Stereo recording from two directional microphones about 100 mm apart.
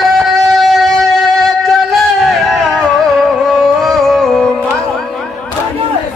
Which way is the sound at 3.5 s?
Centre (ahead or behind).